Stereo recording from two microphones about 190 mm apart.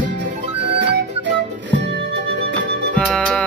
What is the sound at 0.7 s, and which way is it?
Music, 70° right (ahead or behind).